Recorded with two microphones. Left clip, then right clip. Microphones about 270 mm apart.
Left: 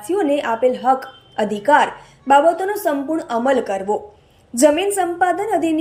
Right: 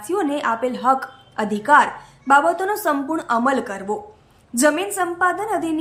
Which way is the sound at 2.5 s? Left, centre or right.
Right.